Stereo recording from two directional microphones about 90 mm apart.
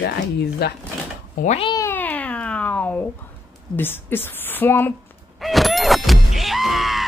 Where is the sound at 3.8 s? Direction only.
25° left (ahead or behind).